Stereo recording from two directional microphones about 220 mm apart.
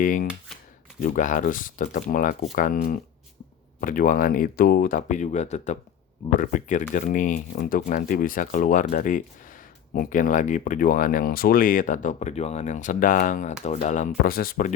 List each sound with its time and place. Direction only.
0.0 s speech: 35° left (ahead or behind)